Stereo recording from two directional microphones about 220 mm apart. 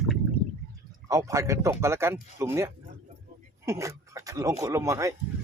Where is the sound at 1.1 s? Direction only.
15° right (ahead or behind).